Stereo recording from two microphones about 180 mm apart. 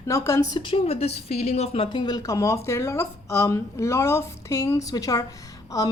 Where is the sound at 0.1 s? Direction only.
15° left (ahead or behind).